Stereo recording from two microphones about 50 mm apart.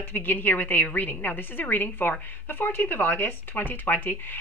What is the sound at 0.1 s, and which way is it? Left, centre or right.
A woman's voice, left.